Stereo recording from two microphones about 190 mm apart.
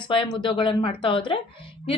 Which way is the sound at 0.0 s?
25° left (ahead or behind).